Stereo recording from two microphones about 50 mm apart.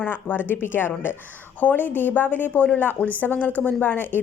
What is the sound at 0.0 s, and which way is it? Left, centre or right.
A woman's voice, left.